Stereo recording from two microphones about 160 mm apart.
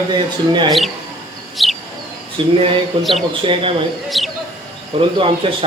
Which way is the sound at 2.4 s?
35° right (ahead or behind).